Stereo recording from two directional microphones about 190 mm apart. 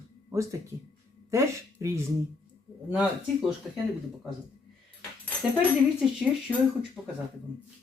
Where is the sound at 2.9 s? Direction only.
5° right (ahead or behind).